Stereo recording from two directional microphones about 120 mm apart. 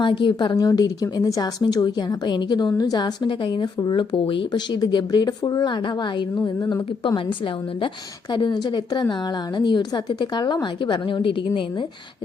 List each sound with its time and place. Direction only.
0.0 s a woman's voice: 45° left (ahead or behind)
0.5 s a woman's voice: 30° left (ahead or behind)
7.3 s a woman's voice: 45° left (ahead or behind)